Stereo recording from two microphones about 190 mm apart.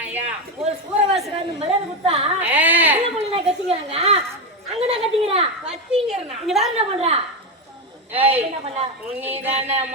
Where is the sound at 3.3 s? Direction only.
30° right (ahead or behind).